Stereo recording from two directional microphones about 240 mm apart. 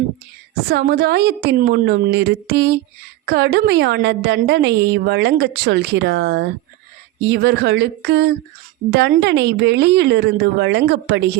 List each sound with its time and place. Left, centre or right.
0.7 s a woman's voice: right